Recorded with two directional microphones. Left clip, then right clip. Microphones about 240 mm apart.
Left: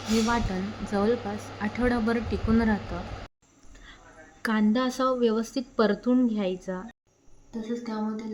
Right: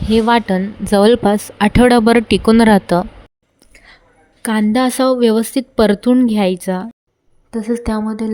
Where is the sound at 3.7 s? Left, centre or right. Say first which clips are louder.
Right 6 dB; right.